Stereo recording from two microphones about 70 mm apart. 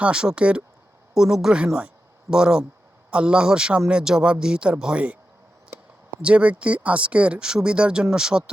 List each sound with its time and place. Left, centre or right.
0.0 s speech: centre
6.2 s speech: centre